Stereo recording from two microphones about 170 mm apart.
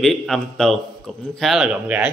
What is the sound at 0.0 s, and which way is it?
A man's voice, centre (ahead or behind).